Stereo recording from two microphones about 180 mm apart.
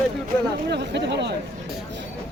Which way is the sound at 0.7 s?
70° right (ahead or behind).